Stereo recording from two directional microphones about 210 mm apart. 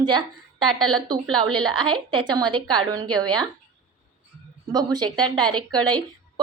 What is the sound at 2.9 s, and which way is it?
Speech, 90° right.